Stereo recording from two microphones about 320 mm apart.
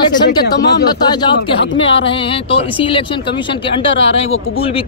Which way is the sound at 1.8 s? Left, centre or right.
Centre.